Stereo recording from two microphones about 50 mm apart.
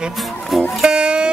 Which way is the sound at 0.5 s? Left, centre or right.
Centre.